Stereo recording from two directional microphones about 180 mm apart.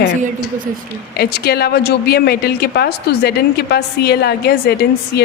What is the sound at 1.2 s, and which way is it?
A woman's voice, 60° left (ahead or behind).